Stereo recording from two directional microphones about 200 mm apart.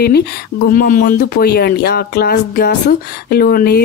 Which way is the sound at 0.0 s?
50° left (ahead or behind).